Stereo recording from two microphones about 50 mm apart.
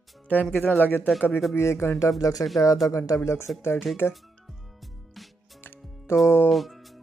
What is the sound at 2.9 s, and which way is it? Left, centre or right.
Speech, left.